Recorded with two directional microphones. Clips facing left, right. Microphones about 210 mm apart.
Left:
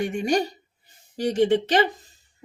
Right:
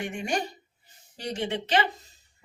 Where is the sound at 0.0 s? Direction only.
40° left (ahead or behind).